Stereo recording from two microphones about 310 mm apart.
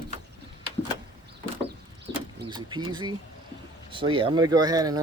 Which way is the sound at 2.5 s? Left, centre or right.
Centre.